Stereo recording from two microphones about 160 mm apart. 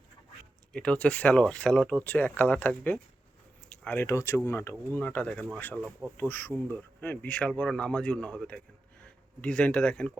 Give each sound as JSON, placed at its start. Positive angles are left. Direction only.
{"t": 0.7, "sound": "speech", "side_deg": 5}